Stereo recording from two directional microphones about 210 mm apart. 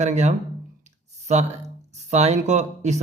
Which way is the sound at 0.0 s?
35° right (ahead or behind).